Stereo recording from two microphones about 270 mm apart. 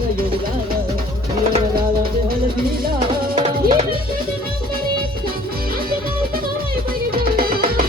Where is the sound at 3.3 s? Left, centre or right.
Centre.